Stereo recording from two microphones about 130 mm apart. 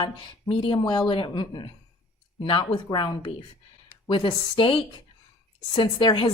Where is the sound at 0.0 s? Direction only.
40° left (ahead or behind).